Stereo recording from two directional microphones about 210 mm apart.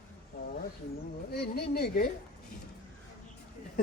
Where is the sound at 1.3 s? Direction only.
45° left (ahead or behind).